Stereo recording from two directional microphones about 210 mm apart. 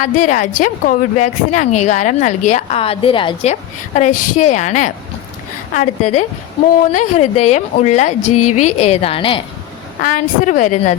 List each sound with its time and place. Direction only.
0.0 s speech: 35° left (ahead or behind)
10.0 s speech: 35° left (ahead or behind)